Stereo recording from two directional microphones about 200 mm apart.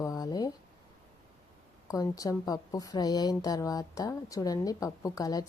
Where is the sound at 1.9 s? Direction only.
15° left (ahead or behind).